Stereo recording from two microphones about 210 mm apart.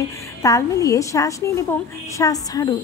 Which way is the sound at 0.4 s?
15° left (ahead or behind).